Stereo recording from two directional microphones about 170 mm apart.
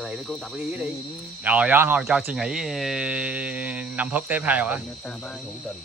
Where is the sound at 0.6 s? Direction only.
10° right (ahead or behind).